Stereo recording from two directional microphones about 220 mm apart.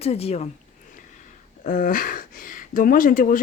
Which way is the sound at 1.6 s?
40° left (ahead or behind).